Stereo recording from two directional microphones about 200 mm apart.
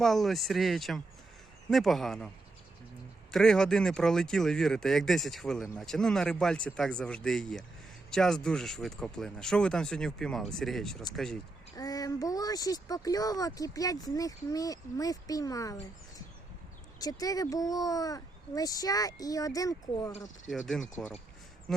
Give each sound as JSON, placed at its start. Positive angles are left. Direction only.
{"t": 0.0, "sound": "speech", "side_deg": 0}
{"t": 3.3, "sound": "speech", "side_deg": 5}
{"t": 11.8, "sound": "speech", "side_deg": 15}
{"t": 20.5, "sound": "speech", "side_deg": 0}